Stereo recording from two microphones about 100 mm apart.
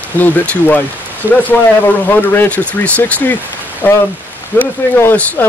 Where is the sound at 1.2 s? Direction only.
20° right (ahead or behind).